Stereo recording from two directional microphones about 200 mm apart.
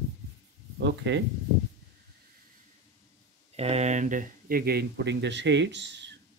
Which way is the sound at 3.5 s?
30° right (ahead or behind).